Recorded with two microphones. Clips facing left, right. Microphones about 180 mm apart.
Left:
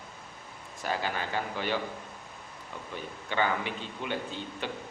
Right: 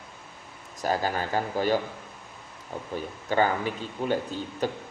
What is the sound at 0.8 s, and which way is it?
Speech, 40° right (ahead or behind).